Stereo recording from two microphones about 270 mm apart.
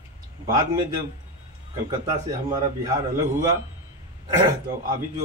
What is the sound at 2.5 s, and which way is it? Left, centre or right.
Speech, centre.